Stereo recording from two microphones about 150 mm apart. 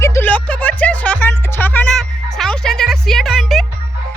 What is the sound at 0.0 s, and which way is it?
Music, 15° left (ahead or behind).